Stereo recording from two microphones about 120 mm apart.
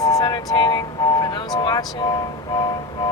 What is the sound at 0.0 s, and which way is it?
Music, 30° left (ahead or behind).